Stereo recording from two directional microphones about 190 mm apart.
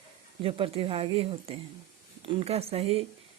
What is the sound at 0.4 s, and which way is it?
Speech, 30° right (ahead or behind).